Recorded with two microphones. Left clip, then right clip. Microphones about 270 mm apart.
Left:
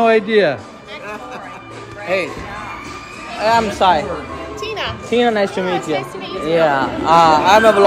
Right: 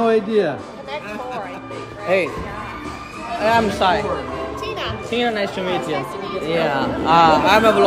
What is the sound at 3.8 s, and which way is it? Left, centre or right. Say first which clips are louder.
Speech: left 4 dB; centre.